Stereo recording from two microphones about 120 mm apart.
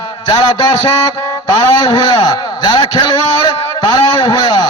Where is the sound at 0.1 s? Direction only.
35° left (ahead or behind).